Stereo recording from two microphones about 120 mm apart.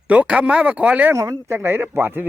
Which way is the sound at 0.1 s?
10° right (ahead or behind).